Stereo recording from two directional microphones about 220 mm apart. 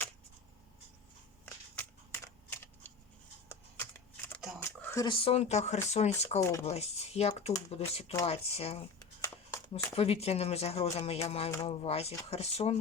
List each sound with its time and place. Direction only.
1.7 s scissors: 5° left (ahead or behind)
4.8 s a sound: 10° left (ahead or behind)
5.0 s speech: 25° left (ahead or behind)